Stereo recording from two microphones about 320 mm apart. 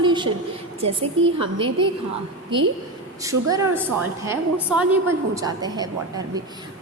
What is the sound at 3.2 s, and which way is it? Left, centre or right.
A woman's voice, centre.